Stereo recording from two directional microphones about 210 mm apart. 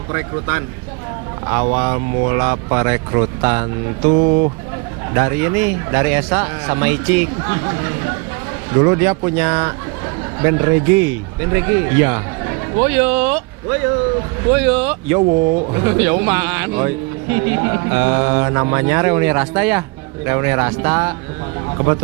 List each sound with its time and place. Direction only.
0.1 s a man's voice: 15° right (ahead or behind)
1.6 s a man's voice: 20° right (ahead or behind)
5.1 s a man's voice: 10° right (ahead or behind)